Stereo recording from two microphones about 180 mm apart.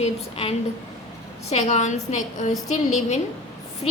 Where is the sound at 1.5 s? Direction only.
40° left (ahead or behind).